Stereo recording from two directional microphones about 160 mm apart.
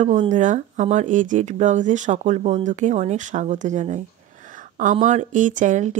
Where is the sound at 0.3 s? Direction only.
50° right (ahead or behind).